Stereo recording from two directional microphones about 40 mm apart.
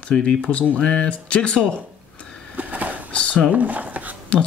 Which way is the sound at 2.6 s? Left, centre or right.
Right.